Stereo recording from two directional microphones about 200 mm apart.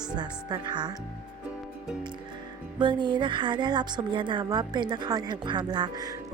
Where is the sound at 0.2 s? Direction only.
20° right (ahead or behind).